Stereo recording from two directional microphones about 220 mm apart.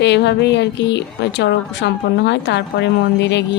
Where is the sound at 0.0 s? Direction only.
50° left (ahead or behind).